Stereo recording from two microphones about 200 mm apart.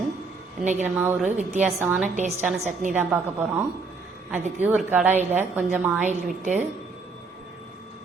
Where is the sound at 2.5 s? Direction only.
35° right (ahead or behind).